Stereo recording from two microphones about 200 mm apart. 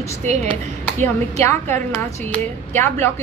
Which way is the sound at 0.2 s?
35° right (ahead or behind).